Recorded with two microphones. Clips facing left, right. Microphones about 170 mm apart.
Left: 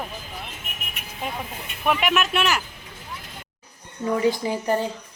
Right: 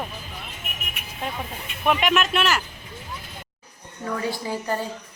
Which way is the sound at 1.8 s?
5° left (ahead or behind).